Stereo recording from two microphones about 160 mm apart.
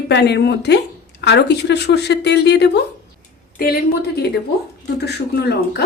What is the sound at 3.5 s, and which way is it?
Speech, 70° left (ahead or behind).